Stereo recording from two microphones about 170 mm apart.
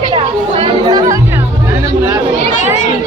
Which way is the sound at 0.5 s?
30° right (ahead or behind).